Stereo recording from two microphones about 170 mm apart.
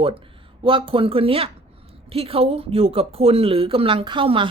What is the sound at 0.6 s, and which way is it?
Speech, 30° right (ahead or behind).